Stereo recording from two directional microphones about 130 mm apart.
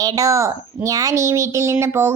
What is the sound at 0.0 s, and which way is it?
Speech, 30° right (ahead or behind).